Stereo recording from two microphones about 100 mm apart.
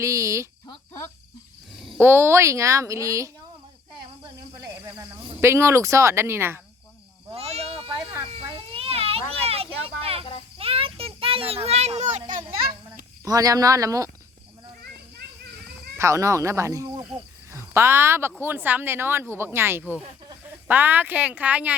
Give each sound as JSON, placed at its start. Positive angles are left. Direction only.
{"t": 0.0, "sound": "speech", "side_deg": -30}
{"t": 2.0, "sound": "speech", "side_deg": -25}
{"t": 4.6, "sound": "cricket", "side_deg": -35}
{"t": 7.3, "sound": "a sound", "side_deg": -90}
{"t": 10.0, "sound": "cricket", "side_deg": -70}
{"t": 10.6, "sound": "children playing", "side_deg": -70}
{"t": 13.2, "sound": "speech", "side_deg": -35}
{"t": 16.0, "sound": "speech", "side_deg": -30}